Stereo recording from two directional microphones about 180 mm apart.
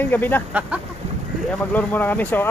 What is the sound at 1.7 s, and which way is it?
Speech, 10° left (ahead or behind).